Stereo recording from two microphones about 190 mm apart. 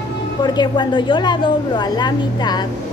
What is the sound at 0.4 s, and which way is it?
A woman's voice, 25° left (ahead or behind).